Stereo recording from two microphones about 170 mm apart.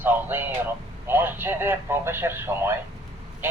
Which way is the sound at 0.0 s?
10° right (ahead or behind).